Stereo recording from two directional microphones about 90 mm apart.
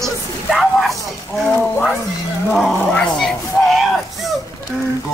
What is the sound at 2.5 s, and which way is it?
Roaring cats, 5° left (ahead or behind).